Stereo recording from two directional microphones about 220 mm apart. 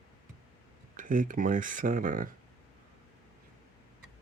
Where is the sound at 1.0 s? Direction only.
40° right (ahead or behind).